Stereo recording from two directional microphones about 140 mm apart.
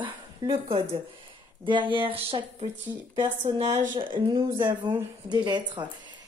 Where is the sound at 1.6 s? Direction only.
35° right (ahead or behind).